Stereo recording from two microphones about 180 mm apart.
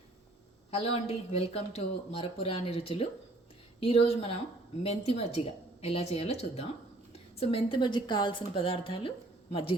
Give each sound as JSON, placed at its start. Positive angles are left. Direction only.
{"t": 0.7, "sound": "a woman's voice", "side_deg": 35}